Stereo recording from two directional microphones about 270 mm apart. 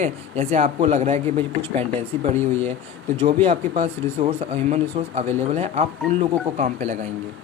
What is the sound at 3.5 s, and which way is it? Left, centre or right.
Speech, right.